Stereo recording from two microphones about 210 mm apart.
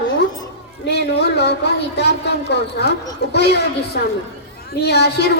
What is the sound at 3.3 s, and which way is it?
A woman's voice, 55° left (ahead or behind).